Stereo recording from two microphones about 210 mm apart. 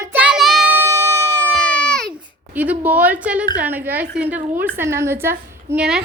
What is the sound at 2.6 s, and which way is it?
A woman's voice, 10° right (ahead or behind).